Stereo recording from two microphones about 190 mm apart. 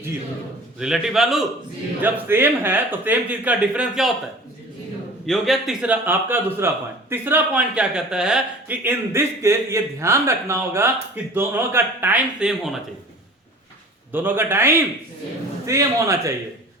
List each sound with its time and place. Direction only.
0.8 s a man's voice: 5° right (ahead or behind)
5.2 s a man's voice: centre (ahead or behind)
14.1 s a man's voice: 10° right (ahead or behind)